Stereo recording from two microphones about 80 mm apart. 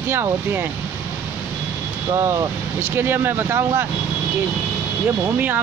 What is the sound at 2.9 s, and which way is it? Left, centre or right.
Speech, right.